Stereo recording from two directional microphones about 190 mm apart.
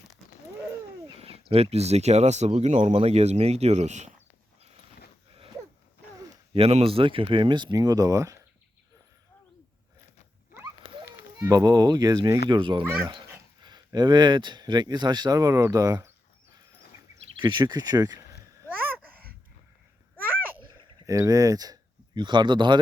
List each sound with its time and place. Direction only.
1.2 s speech: 30° right (ahead or behind)
6.5 s speech: 30° right (ahead or behind); by 8.4 s 15° right (ahead or behind)
11.0 s speech: 15° right (ahead or behind)
12.8 s speech: 10° right (ahead or behind)
13.6 s speech: 20° right (ahead or behind)
17.3 s speech: 25° right (ahead or behind)
18.6 s a sound: 10° right (ahead or behind)
20.2 s a sound: 10° right (ahead or behind)
21.1 s speech: 15° right (ahead or behind)